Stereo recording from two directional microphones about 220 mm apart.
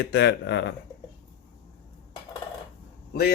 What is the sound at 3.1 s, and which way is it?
Speech, 45° left (ahead or behind).